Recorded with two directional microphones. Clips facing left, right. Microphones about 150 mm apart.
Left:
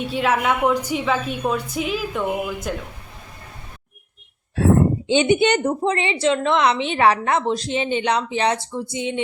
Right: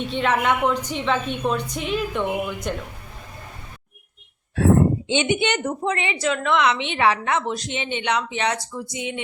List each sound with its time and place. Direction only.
0.0 s a woman's voice: 5° left (ahead or behind)
5.0 s a woman's voice: 35° left (ahead or behind)